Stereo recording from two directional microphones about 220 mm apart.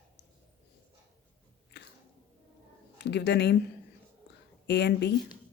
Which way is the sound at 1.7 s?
50° left (ahead or behind).